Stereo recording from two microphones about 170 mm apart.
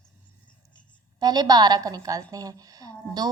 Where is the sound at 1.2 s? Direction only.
25° right (ahead or behind).